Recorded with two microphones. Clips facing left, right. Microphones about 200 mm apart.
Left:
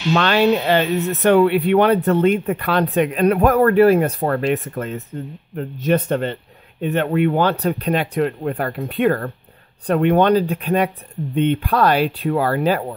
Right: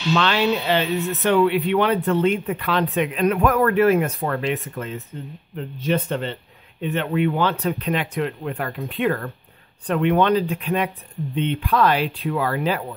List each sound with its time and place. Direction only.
0.1 s speech: 50° left (ahead or behind)